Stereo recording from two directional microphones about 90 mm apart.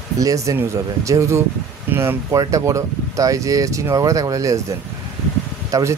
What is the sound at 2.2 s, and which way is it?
Speech, 35° right (ahead or behind).